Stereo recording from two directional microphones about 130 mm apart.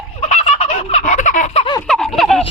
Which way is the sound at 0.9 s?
65° left (ahead or behind).